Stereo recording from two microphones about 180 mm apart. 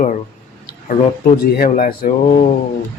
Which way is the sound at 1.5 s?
55° left (ahead or behind).